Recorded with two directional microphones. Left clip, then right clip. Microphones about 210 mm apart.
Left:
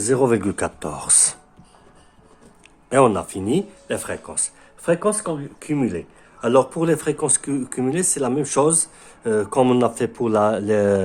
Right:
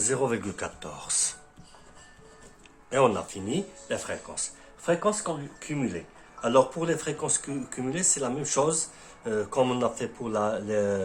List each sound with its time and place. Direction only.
0.0 s speech: 50° left (ahead or behind)
2.9 s speech: 55° left (ahead or behind)